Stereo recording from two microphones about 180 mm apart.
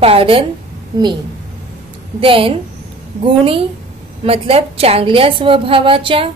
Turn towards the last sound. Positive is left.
turn(degrees=-30)  # may be behind; listen again after turning